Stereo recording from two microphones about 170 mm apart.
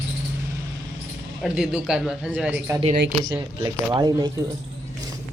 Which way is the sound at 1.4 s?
5° right (ahead or behind).